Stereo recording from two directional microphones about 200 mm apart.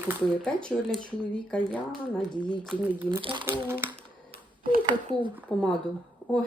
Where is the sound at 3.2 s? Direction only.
25° right (ahead or behind).